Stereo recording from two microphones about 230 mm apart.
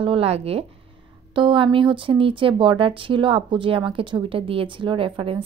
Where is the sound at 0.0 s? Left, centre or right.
Right.